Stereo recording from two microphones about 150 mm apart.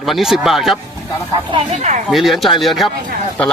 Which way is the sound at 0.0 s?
Centre (ahead or behind).